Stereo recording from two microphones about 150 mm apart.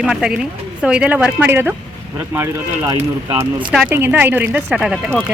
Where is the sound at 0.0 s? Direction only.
5° right (ahead or behind).